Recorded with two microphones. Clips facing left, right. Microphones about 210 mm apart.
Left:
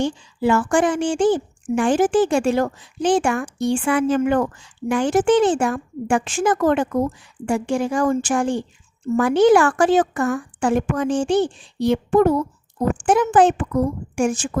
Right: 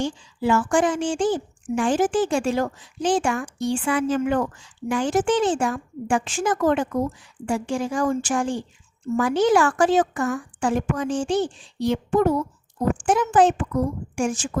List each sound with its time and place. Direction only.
0.0 s a woman's voice: 65° left (ahead or behind)